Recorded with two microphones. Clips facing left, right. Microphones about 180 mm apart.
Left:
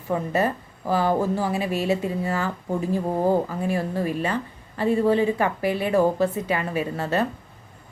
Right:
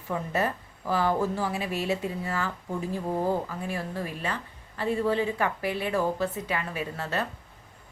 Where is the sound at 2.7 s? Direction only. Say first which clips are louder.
Left 7 dB; 30° left (ahead or behind).